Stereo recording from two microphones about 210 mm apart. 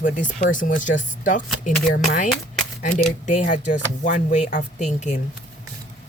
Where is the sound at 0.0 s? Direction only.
40° left (ahead or behind).